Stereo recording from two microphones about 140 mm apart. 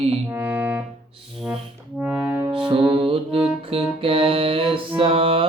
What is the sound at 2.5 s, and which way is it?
Music, 40° right (ahead or behind).